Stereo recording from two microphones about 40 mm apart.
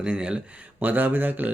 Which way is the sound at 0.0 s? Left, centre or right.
Right.